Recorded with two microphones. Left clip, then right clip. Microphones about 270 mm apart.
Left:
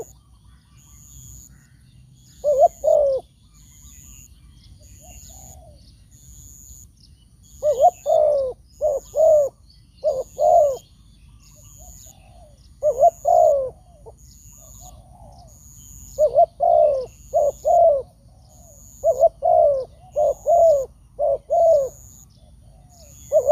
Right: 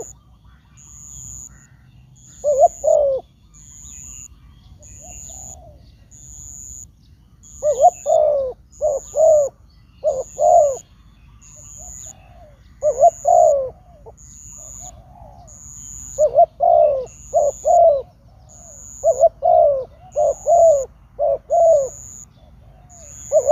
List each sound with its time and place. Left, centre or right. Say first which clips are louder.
1.0 s a sound: right 10 dB; centre
2.4 s bird: right 2 dB; centre
6.1 s bird: right 9 dB; centre
7.6 s bird: right 2 dB; centre
11.4 s bird: right 9 dB; right
12.8 s bird: right 2 dB; centre
15.6 s bird: right 9 dB; centre
16.0 s bird: right 2 dB; centre
17.0 s bird: right 2 dB; centre
17.3 s bird: right 3 dB; centre
18.6 s owl: right 8 dB; right
18.9 s bird: right 2 dB; centre
23.3 s a sound: right 2 dB; centre